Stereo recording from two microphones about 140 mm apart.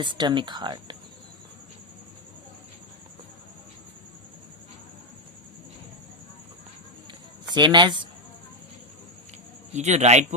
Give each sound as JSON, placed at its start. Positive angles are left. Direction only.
{"t": 0.0, "sound": "speech", "side_deg": -35}
{"t": 7.4, "sound": "speech", "side_deg": -30}
{"t": 9.7, "sound": "speech", "side_deg": -55}